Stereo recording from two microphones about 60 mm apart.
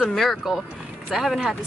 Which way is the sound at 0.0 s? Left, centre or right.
Centre.